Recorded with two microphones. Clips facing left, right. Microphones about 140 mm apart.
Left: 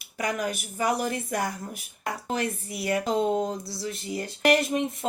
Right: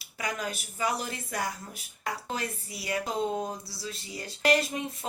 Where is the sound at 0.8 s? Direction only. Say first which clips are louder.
Left 5 dB; 50° left (ahead or behind).